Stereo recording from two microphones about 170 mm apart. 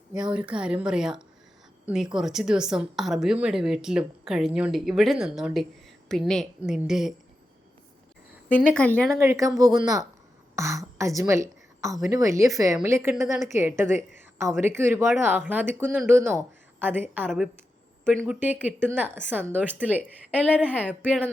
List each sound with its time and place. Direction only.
0.3 s speech: 5° right (ahead or behind)
8.7 s speech: 5° left (ahead or behind)
9.1 s a woman's voice: 15° right (ahead or behind)